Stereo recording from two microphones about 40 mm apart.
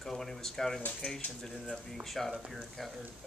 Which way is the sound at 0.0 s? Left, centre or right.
Centre.